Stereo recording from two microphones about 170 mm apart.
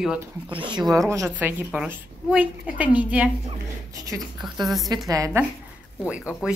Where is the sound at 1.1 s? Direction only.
15° right (ahead or behind).